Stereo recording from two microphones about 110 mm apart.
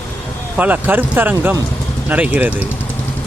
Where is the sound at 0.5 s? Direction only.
15° right (ahead or behind).